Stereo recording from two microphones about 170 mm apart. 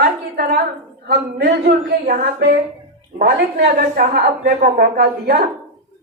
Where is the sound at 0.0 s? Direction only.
65° right (ahead or behind).